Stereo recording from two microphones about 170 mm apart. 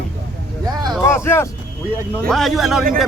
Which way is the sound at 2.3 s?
Centre (ahead or behind).